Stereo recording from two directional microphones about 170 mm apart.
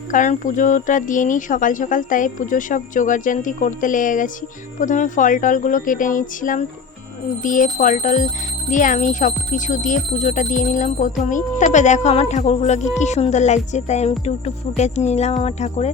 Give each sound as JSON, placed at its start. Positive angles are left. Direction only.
{"t": 0.1, "sound": "speech", "side_deg": 50}